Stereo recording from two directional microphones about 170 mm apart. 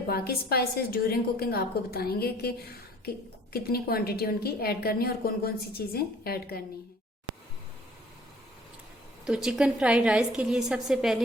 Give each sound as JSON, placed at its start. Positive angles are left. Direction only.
{"t": 0.1, "sound": "a woman's voice", "side_deg": 65}
{"t": 3.5, "sound": "a woman's voice", "side_deg": 65}
{"t": 9.2, "sound": "a woman's voice", "side_deg": -5}